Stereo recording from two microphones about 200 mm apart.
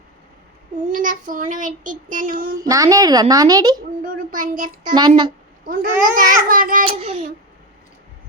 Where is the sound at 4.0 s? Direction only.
45° right (ahead or behind).